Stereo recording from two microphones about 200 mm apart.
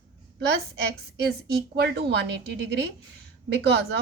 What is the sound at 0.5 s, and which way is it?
A woman's voice, 55° right (ahead or behind).